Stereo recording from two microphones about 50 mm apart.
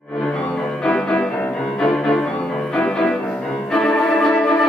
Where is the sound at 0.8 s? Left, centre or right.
Centre.